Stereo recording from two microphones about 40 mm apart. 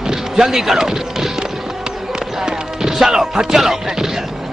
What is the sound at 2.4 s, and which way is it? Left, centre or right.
Music, centre.